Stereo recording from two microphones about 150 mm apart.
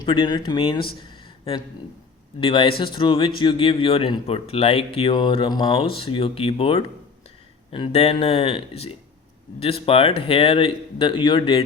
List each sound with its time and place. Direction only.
0.0 s a man's voice: 30° left (ahead or behind)